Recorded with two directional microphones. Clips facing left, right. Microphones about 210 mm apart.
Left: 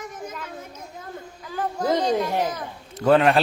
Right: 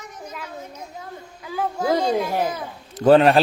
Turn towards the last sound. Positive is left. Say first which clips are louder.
# right 4 dB
turn(degrees=-35)  # may be behind; listen again after turning